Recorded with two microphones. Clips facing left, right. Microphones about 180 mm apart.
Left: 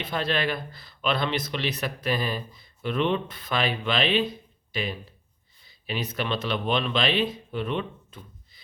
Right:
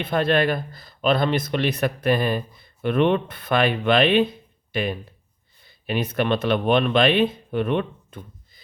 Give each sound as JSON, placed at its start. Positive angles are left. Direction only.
{"t": 0.0, "sound": "speech", "side_deg": -55}